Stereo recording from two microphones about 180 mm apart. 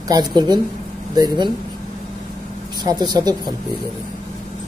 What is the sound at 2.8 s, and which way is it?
Speech, 25° right (ahead or behind).